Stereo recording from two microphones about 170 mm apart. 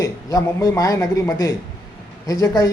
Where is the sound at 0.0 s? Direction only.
20° left (ahead or behind).